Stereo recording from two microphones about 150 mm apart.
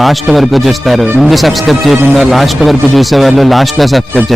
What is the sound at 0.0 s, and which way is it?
Speech, centre (ahead or behind).